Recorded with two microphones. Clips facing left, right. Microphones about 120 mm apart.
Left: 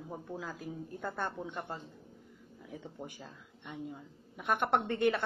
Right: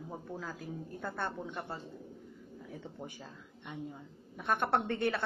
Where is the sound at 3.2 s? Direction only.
Centre (ahead or behind).